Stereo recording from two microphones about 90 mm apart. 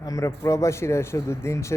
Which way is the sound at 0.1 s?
35° left (ahead or behind).